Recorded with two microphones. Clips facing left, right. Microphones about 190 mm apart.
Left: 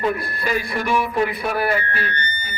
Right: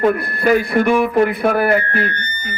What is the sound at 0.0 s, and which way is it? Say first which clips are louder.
A man's voice: right 7 dB; 55° right (ahead or behind).